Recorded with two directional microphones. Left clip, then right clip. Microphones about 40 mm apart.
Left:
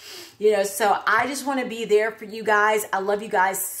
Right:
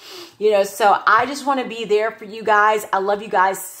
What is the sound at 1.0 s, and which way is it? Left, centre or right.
A woman's voice, left.